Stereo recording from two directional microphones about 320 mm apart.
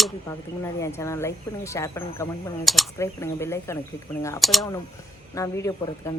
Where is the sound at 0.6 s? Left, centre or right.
Centre.